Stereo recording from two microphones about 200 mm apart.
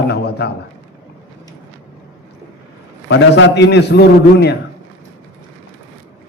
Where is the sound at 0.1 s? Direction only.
55° left (ahead or behind).